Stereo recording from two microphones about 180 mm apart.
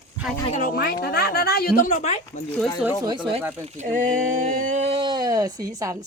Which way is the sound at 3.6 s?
40° right (ahead or behind).